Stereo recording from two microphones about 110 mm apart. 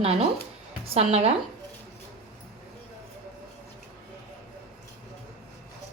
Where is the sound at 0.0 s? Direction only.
60° right (ahead or behind).